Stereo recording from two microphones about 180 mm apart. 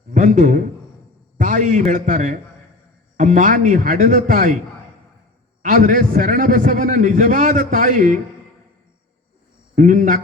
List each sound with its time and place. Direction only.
0.1 s a man's voice: 45° right (ahead or behind)
5.6 s a man's voice: 50° right (ahead or behind)
9.7 s a man's voice: 45° right (ahead or behind)